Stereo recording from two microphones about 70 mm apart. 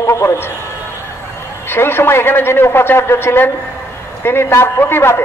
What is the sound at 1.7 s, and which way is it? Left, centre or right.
A man's voice, left.